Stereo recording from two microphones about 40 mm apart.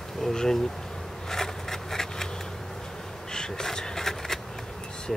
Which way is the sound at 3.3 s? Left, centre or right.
Centre.